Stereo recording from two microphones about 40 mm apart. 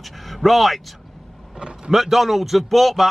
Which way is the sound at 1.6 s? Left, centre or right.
Right.